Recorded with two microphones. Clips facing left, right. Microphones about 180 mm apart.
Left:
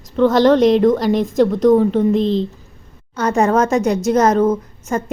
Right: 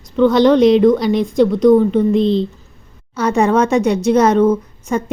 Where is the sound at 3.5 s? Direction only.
35° left (ahead or behind).